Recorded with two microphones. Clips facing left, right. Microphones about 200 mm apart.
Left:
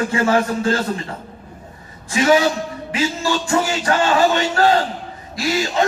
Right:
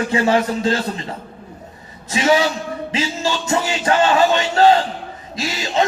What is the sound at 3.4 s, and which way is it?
Speech, 20° right (ahead or behind).